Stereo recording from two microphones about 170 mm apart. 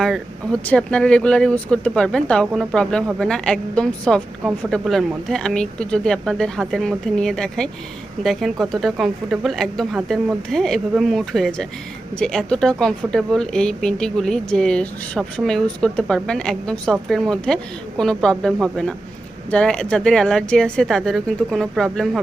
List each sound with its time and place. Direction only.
0.0 s a woman's voice: 5° left (ahead or behind)